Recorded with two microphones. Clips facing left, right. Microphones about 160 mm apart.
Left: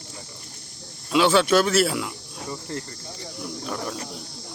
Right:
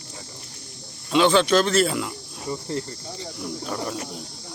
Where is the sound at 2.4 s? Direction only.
20° right (ahead or behind).